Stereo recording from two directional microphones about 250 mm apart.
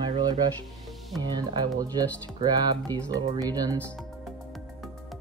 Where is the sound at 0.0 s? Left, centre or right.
Centre.